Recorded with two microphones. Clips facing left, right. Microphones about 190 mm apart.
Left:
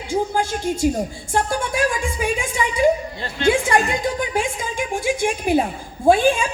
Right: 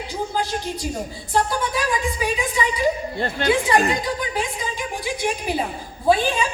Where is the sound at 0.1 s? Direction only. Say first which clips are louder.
Left 5 dB; 45° left (ahead or behind).